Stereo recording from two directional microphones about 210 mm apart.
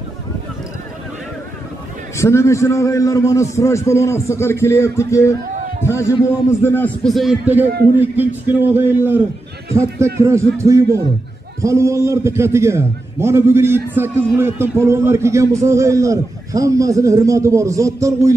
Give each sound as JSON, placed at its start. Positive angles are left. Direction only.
{"t": 2.1, "sound": "a man's voice", "side_deg": 15}
{"t": 5.5, "sound": "a sound", "side_deg": -35}
{"t": 5.9, "sound": "a man's voice", "side_deg": 15}